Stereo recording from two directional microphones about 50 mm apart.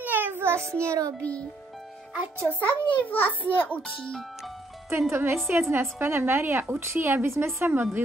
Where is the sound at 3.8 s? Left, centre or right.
Centre.